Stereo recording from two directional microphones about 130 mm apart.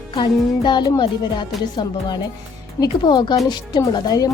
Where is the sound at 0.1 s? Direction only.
35° left (ahead or behind).